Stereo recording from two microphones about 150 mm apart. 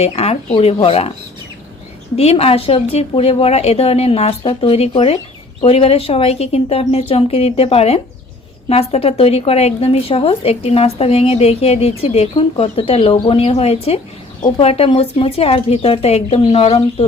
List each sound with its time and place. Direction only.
0.0 s speech: 45° left (ahead or behind)
2.1 s speech: 40° left (ahead or behind)